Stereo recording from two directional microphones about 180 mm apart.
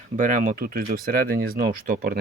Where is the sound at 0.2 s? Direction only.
45° right (ahead or behind).